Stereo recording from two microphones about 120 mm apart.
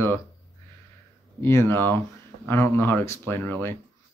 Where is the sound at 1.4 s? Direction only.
20° left (ahead or behind).